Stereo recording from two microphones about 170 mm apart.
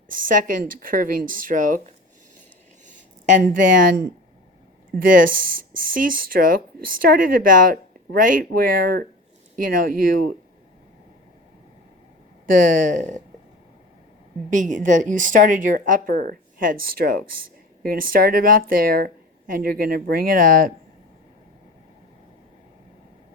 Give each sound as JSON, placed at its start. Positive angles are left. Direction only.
{"t": 0.1, "sound": "speech", "side_deg": -55}
{"t": 2.8, "sound": "a sound", "side_deg": -50}
{"t": 5.0, "sound": "speech", "side_deg": -55}
{"t": 12.9, "sound": "speech", "side_deg": -45}
{"t": 14.5, "sound": "speech", "side_deg": -50}